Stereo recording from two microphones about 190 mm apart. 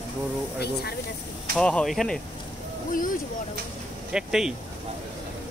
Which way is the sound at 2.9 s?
45° left (ahead or behind).